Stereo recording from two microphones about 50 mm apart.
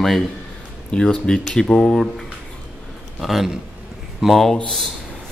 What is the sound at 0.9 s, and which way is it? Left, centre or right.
Speech, centre.